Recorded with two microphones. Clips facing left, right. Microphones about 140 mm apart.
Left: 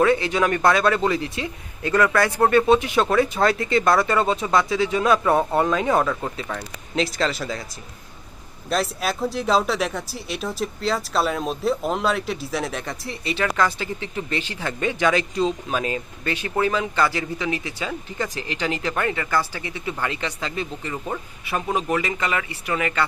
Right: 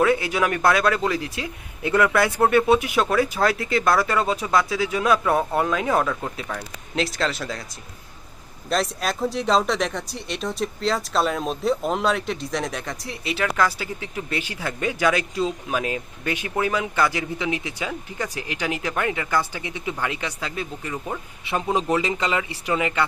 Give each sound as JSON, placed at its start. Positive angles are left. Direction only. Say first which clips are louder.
{"t": 0.0, "sound": "speech", "louder": "left 1 dB", "side_deg": -5}
{"t": 1.8, "sound": "speech", "louder": "even", "side_deg": -15}
{"t": 8.7, "sound": "speech", "louder": "even", "side_deg": 5}
{"t": 21.4, "sound": "speech", "louder": "right 2 dB", "side_deg": -25}